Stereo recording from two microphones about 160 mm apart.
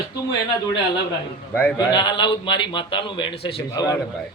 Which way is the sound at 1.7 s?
30° left (ahead or behind).